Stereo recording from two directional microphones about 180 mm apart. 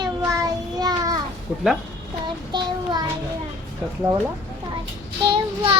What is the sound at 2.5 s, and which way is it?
Child singing, 25° right (ahead or behind).